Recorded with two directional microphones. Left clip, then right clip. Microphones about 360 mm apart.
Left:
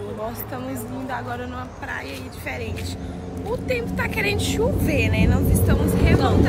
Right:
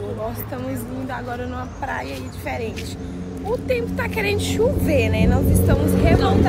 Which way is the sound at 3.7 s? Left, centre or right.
Centre.